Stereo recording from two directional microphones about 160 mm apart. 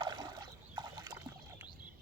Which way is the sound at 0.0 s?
25° right (ahead or behind).